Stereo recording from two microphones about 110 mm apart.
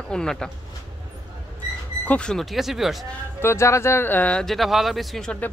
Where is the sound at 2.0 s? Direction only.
10° left (ahead or behind).